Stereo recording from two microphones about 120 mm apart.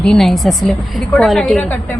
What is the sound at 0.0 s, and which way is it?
Speech, 5° left (ahead or behind).